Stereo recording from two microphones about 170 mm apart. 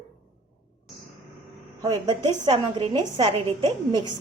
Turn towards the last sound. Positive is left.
turn(degrees=-25)  # may be behind; listen again after turning